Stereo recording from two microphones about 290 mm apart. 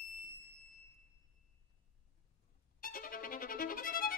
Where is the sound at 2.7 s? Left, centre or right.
Left.